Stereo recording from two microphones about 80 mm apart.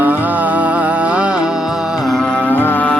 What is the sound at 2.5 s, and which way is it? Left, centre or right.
Music, left.